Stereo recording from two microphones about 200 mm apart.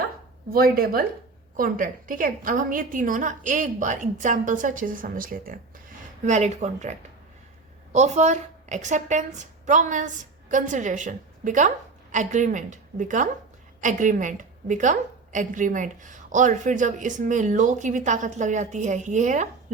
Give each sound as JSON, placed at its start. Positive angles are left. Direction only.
{"t": 0.5, "sound": "a woman's voice", "side_deg": -50}